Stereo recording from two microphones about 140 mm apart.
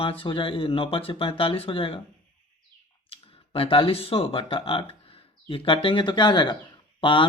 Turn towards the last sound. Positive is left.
turn(degrees=35)  # may be behind; listen again after turning